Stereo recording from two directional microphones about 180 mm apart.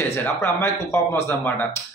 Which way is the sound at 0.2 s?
15° left (ahead or behind).